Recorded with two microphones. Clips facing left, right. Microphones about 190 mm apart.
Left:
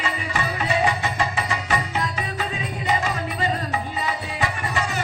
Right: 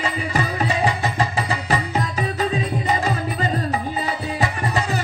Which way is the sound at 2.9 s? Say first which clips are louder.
Left 1 dB; 35° right (ahead or behind).